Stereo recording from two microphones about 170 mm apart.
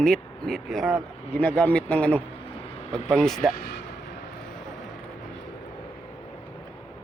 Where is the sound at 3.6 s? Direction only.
70° left (ahead or behind).